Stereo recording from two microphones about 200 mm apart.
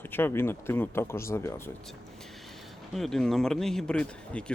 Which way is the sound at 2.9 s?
Centre (ahead or behind).